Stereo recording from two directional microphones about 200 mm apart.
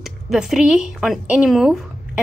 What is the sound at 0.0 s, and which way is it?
A woman's voice, centre (ahead or behind).